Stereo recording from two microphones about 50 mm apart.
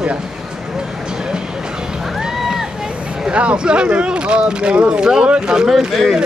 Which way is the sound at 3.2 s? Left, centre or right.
Right.